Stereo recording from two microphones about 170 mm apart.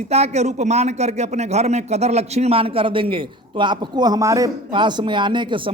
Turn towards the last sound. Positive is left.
turn(degrees=-30)  # may be behind; listen again after turning